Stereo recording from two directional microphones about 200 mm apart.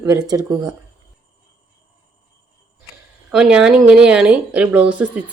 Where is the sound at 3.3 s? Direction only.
5° right (ahead or behind).